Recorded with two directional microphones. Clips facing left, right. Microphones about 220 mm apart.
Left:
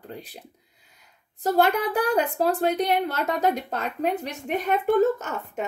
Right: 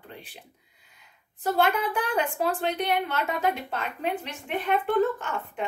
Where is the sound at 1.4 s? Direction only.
40° left (ahead or behind).